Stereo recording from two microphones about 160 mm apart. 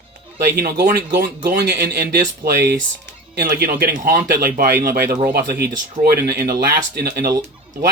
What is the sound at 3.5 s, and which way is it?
Speech, 70° right (ahead or behind).